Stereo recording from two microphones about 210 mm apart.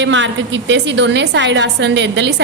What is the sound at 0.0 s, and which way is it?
A woman's voice, 60° right (ahead or behind).